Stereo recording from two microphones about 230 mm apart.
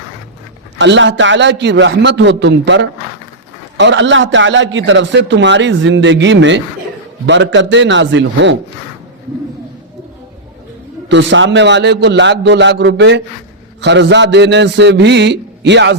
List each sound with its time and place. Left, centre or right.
0.8 s a man's voice: right
11.1 s a man's voice: right